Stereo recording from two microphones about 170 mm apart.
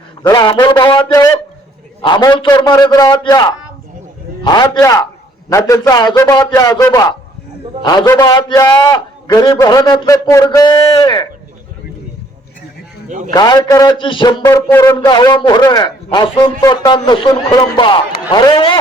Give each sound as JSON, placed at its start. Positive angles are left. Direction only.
{"t": 0.2, "sound": "a man's voice", "side_deg": 25}
{"t": 13.1, "sound": "a man's voice", "side_deg": -50}
{"t": 13.3, "sound": "a man's voice", "side_deg": 25}